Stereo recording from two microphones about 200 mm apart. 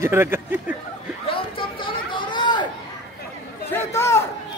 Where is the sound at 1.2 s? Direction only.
25° left (ahead or behind).